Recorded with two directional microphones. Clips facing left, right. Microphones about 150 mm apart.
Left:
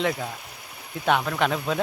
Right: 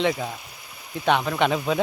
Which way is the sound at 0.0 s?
Centre (ahead or behind).